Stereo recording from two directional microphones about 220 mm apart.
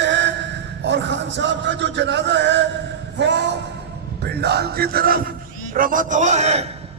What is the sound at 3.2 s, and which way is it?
A man's voice, 50° right (ahead or behind).